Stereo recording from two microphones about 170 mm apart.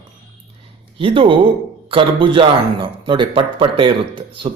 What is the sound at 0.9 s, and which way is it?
Speech, 30° right (ahead or behind).